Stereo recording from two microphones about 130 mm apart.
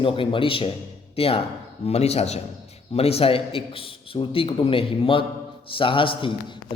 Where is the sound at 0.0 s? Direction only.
40° left (ahead or behind).